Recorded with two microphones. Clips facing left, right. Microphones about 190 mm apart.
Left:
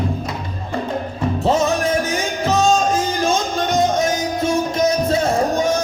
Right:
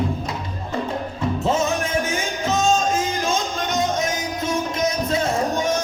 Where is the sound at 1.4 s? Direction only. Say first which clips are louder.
Left 5 dB; 35° left (ahead or behind).